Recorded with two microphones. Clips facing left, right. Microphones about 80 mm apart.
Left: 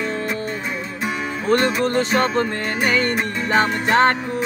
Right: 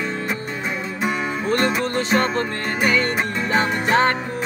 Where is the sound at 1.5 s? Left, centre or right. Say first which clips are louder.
Left 3 dB; centre.